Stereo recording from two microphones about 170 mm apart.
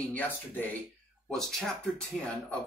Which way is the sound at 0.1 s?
10° left (ahead or behind).